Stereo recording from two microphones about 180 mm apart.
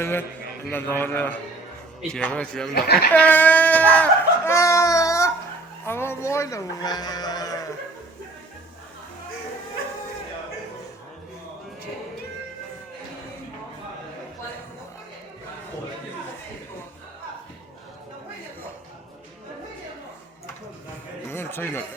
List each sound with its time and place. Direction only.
0.0 s a man's voice: 10° left (ahead or behind)
2.7 s speech: 65° left (ahead or behind)
3.1 s baby cry: 10° left (ahead or behind)
5.8 s speech: 10° left (ahead or behind)
21.2 s a sound: 10° left (ahead or behind)